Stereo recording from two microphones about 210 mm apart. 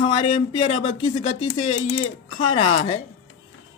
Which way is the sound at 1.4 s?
75° left (ahead or behind).